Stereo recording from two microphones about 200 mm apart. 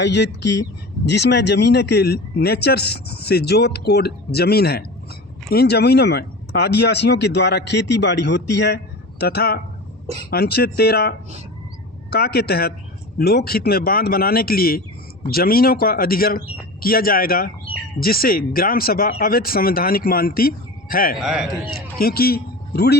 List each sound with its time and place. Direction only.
0.0 s speech: 60° left (ahead or behind)
12.1 s speech: 50° left (ahead or behind)
21.2 s a man's voice: centre (ahead or behind)
21.9 s a man's voice: 50° left (ahead or behind)